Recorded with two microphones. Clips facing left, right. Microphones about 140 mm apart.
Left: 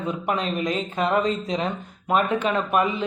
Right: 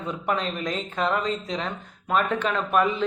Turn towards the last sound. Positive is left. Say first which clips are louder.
# left 1 dB
turn(degrees=10)  # may be behind; listen again after turning